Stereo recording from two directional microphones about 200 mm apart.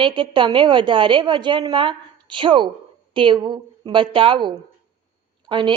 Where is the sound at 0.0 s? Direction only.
25° right (ahead or behind).